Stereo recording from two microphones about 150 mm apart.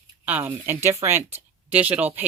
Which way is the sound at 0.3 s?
10° right (ahead or behind).